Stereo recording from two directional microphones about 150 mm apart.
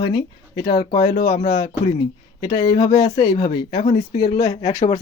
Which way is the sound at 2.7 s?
25° left (ahead or behind).